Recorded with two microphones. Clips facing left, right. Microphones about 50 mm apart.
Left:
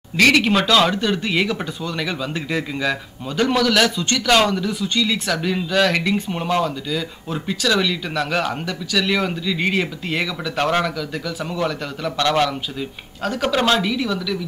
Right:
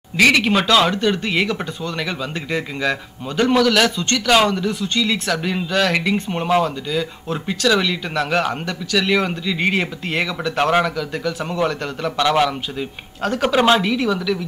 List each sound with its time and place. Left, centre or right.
0.2 s a man's voice: centre
3.9 s speech: centre
4.3 s a man's voice: centre